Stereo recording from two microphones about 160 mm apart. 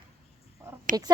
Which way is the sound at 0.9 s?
55° right (ahead or behind).